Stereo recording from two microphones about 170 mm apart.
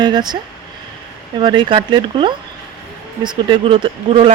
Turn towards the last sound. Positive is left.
turn(degrees=-30)  # may be behind; listen again after turning